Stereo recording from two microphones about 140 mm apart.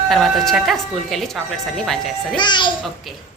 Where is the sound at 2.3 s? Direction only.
35° left (ahead or behind).